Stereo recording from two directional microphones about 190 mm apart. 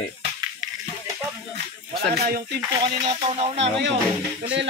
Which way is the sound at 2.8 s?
30° right (ahead or behind).